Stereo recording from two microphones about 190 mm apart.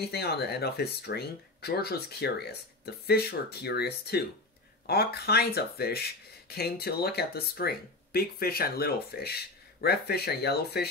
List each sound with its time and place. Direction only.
0.1 s speech: 60° left (ahead or behind)